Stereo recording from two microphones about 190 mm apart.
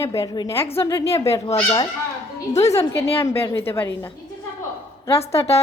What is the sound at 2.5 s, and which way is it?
Speech, 35° left (ahead or behind).